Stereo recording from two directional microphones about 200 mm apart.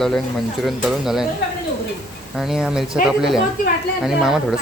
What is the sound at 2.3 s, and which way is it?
Speech, centre (ahead or behind).